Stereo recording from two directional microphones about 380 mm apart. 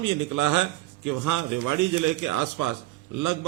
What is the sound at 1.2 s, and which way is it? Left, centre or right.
A man's voice, right.